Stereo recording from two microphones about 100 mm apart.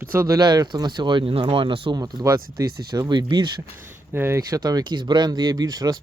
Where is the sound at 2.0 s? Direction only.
35° right (ahead or behind); by 3.5 s 50° right (ahead or behind).